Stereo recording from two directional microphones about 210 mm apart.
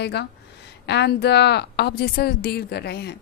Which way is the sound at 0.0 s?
50° left (ahead or behind).